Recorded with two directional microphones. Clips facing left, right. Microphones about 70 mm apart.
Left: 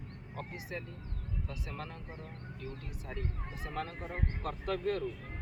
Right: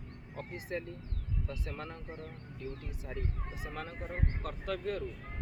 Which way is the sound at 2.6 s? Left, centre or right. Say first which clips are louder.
Right 3 dB; left.